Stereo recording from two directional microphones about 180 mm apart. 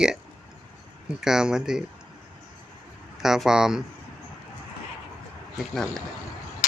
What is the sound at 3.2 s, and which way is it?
Speech, 5° right (ahead or behind).